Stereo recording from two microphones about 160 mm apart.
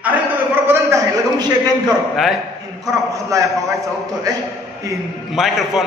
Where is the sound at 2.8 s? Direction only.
20° right (ahead or behind).